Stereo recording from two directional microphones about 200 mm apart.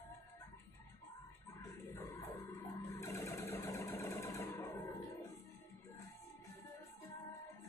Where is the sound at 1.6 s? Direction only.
15° left (ahead or behind).